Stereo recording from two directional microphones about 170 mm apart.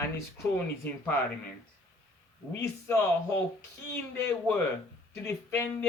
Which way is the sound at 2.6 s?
15° left (ahead or behind).